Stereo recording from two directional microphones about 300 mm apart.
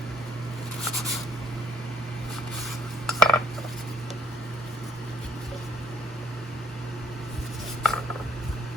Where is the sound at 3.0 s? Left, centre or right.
Centre.